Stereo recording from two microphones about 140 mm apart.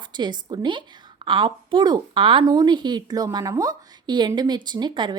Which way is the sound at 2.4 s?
25° right (ahead or behind).